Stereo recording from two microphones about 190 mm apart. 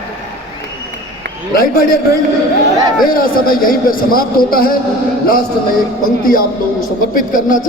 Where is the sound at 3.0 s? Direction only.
50° left (ahead or behind).